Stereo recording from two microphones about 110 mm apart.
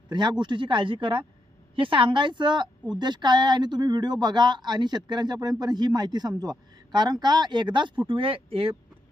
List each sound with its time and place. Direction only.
0.1 s speech: 45° right (ahead or behind)